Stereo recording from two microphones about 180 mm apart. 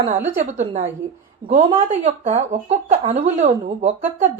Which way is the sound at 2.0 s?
40° right (ahead or behind).